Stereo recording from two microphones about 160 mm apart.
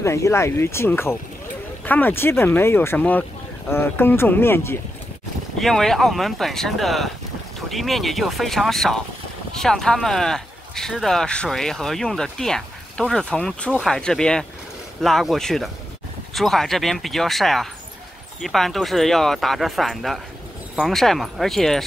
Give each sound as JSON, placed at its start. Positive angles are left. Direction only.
{"t": 0.0, "sound": "speech", "side_deg": 15}
{"t": 5.6, "sound": "speech", "side_deg": 0}